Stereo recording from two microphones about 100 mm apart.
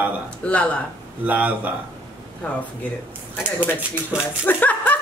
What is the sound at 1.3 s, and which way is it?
Speech, 15° right (ahead or behind).